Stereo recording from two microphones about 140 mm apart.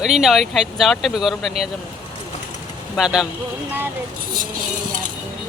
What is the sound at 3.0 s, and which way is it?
Speech, 5° right (ahead or behind).